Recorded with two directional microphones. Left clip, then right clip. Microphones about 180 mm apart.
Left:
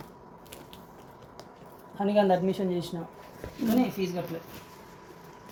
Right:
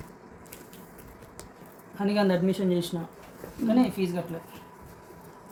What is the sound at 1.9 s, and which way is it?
Speech, 20° right (ahead or behind).